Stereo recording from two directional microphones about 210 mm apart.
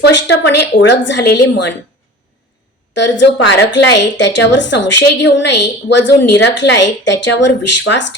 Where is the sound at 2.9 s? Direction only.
60° left (ahead or behind).